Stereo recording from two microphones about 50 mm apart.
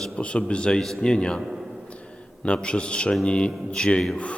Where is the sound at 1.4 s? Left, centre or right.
Centre.